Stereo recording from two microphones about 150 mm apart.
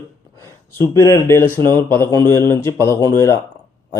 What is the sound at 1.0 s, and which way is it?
Speech, 15° left (ahead or behind).